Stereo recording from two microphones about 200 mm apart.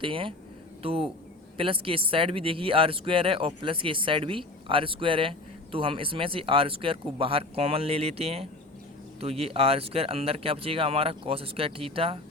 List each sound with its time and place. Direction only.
0.0 s speech: 25° right (ahead or behind)